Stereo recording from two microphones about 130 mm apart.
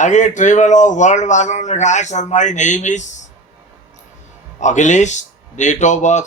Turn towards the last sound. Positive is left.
turn(degrees=65)  # may be behind; listen again after turning